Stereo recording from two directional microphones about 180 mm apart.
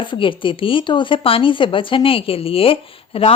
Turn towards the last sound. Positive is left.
turn(degrees=30)  # may be behind; listen again after turning